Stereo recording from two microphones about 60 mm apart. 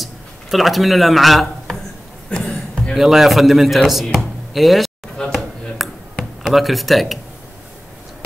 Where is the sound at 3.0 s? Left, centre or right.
Centre.